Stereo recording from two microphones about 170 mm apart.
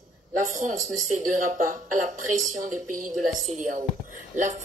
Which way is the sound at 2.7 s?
50° right (ahead or behind).